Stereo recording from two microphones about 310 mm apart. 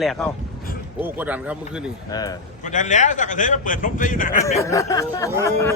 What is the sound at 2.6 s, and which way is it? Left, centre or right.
A man's voice, left.